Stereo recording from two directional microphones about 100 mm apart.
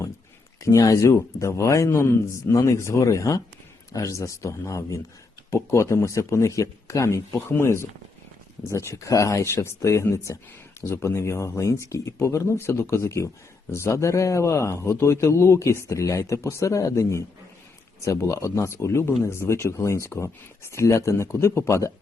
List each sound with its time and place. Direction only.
0.6 s a man's voice: 35° left (ahead or behind)